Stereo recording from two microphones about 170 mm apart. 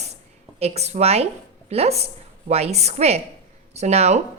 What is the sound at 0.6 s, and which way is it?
A woman's voice, 40° right (ahead or behind).